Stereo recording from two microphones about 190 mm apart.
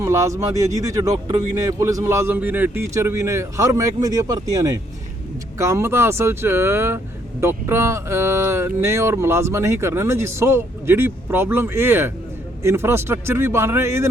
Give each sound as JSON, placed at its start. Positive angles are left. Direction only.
{"t": 0.0, "sound": "speech", "side_deg": -15}